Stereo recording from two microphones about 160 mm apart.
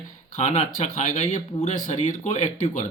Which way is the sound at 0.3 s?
45° left (ahead or behind).